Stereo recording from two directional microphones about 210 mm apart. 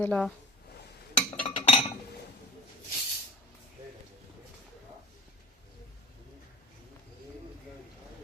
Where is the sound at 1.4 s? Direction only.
30° left (ahead or behind).